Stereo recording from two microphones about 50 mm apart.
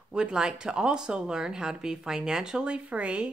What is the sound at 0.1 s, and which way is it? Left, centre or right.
Speech, centre.